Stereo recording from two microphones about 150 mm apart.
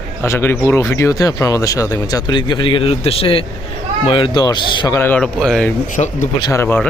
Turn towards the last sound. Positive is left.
turn(degrees=20)  # may be behind; listen again after turning